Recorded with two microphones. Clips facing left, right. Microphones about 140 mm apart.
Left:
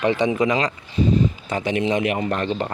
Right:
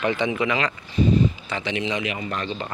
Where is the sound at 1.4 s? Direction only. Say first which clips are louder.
Left 5 dB; 45° left (ahead or behind).